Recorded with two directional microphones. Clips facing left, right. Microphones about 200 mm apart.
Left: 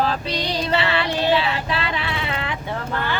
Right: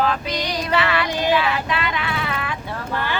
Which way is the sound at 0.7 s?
30° left (ahead or behind).